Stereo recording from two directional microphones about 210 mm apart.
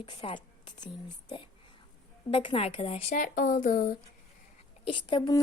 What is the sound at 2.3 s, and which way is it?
A woman's voice, 25° left (ahead or behind).